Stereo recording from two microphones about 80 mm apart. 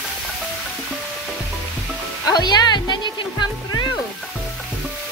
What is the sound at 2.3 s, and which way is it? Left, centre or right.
Music, left.